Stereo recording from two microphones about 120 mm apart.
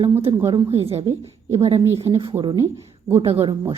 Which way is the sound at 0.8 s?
55° right (ahead or behind).